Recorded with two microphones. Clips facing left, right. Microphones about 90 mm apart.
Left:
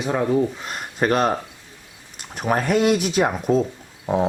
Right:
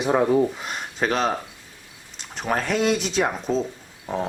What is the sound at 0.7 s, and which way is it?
Speech, 5° left (ahead or behind).